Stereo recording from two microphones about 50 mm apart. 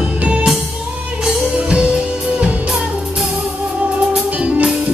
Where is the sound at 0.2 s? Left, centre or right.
Right.